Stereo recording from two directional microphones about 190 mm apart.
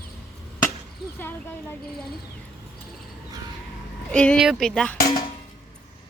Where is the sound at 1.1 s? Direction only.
10° left (ahead or behind).